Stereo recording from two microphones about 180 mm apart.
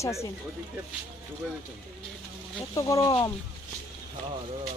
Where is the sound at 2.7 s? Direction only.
15° left (ahead or behind).